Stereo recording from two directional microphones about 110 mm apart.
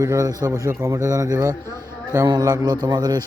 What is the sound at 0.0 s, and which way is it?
A man's voice, 30° right (ahead or behind).